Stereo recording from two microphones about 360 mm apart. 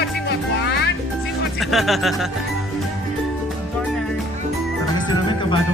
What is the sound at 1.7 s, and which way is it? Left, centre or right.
Speech, centre.